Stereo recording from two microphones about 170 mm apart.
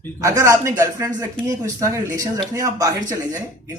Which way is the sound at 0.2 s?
20° right (ahead or behind).